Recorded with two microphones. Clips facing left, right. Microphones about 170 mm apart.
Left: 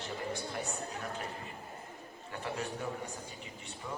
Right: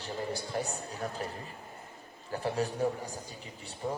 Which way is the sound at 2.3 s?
35° right (ahead or behind).